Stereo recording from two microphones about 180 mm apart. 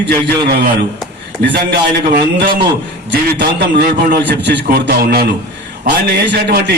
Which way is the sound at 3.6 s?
65° right (ahead or behind).